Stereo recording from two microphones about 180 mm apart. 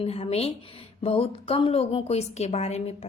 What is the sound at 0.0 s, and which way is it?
A woman's voice, 35° left (ahead or behind).